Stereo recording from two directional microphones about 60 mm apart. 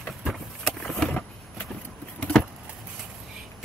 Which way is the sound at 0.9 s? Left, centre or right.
Centre.